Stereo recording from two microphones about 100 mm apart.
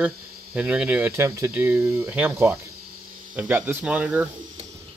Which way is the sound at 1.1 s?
25° right (ahead or behind).